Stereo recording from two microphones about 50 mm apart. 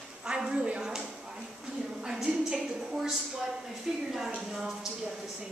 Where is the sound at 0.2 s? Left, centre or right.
Centre.